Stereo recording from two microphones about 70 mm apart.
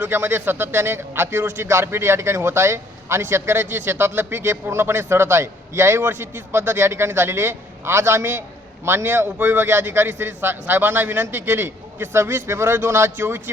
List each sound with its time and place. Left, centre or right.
0.0 s speech: right